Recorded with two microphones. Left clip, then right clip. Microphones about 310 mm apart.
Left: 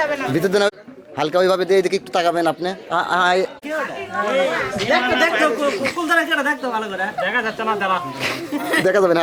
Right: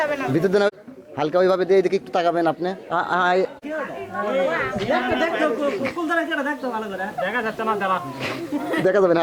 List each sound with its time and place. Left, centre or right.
0.0 s a man's voice: centre